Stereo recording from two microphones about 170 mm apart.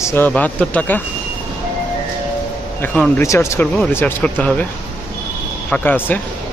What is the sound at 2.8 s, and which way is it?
A man's voice, 10° left (ahead or behind).